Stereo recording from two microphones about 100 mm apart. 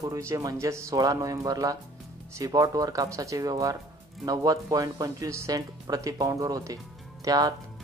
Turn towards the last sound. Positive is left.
turn(degrees=-40)  # may be behind; listen again after turning